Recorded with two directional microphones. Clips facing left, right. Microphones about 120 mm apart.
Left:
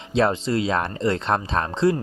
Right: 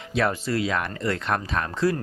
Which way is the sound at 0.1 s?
25° left (ahead or behind).